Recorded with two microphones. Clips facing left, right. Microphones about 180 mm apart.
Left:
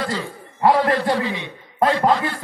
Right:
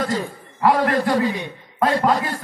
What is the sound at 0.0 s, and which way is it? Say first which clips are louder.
A man's voice: right 2 dB; 45° right (ahead or behind).